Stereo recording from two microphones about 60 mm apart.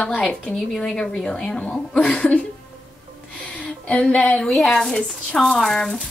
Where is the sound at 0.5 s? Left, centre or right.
Centre.